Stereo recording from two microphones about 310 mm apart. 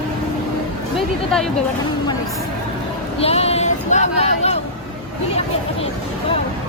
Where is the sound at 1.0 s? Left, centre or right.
Centre.